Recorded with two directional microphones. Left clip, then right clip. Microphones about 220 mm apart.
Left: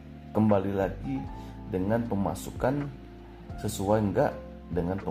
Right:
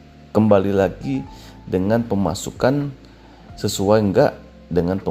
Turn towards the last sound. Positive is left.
turn(degrees=-45)  # may be behind; listen again after turning